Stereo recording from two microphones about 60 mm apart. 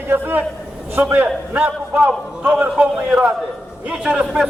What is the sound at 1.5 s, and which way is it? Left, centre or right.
A man's voice, right.